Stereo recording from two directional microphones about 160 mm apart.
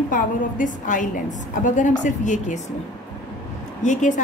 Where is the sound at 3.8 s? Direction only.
50° left (ahead or behind).